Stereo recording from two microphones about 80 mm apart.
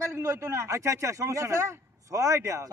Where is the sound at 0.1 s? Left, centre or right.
Right.